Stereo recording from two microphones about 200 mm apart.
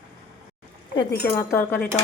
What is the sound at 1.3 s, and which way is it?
Speech, 10° left (ahead or behind).